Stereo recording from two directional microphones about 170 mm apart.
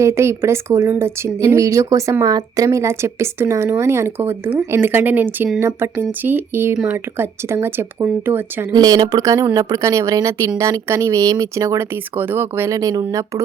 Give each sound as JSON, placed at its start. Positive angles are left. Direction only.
{"t": 0.0, "sound": "speech", "side_deg": -15}
{"t": 8.7, "sound": "speech", "side_deg": -25}